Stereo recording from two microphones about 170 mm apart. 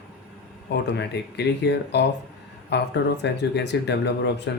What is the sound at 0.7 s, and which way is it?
Speech, 85° left.